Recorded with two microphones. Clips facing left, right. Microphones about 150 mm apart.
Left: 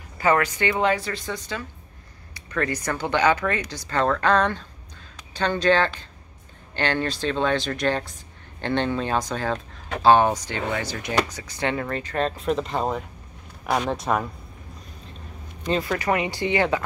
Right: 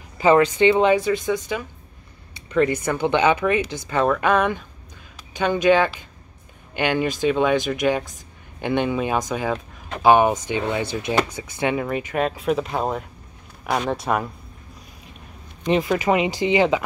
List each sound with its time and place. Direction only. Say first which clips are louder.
0.2 s speech: right 6 dB; 20° right (ahead or behind)
11.3 s speech: right 3 dB; 15° right (ahead or behind)
15.7 s speech: right 4 dB; 15° right (ahead or behind)